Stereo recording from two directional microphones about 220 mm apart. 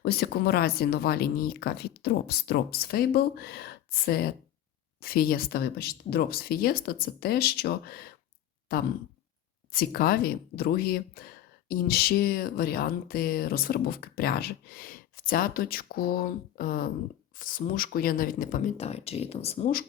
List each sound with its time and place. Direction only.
0.0 s speech: 45° left (ahead or behind); by 19.7 s 30° left (ahead or behind)